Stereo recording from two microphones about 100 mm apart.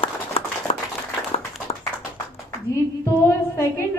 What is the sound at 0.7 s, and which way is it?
Clapping, 90° left.